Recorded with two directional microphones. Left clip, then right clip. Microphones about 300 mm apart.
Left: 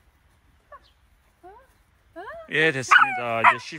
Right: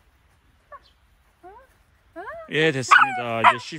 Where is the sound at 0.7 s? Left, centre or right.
Centre.